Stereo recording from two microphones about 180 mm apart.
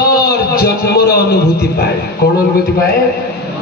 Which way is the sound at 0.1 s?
60° left (ahead or behind).